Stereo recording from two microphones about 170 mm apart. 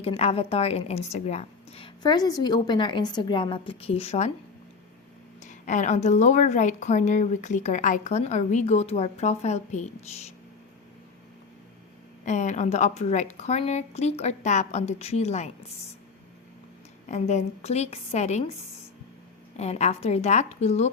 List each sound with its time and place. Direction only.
0.0 s a woman's voice: 35° left (ahead or behind)
5.4 s a woman's voice: 50° left (ahead or behind)
12.2 s a woman's voice: 45° left (ahead or behind)
17.1 s a woman's voice: 40° left (ahead or behind)
19.5 s a woman's voice: 40° left (ahead or behind)